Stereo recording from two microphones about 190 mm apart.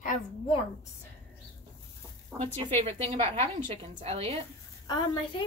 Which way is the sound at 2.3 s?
15° right (ahead or behind).